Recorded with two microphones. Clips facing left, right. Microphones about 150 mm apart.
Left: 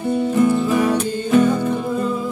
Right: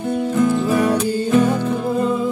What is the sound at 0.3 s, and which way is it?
Music, 10° left (ahead or behind).